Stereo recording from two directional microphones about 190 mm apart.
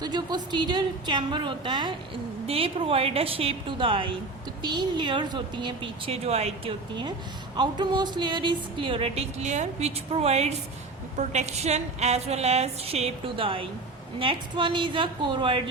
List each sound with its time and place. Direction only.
0.0 s a woman's voice: 20° right (ahead or behind)